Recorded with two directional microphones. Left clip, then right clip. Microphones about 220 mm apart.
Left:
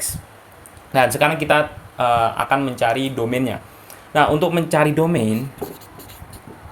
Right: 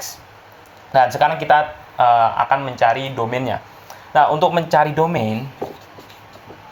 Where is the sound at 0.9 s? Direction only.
30° left (ahead or behind).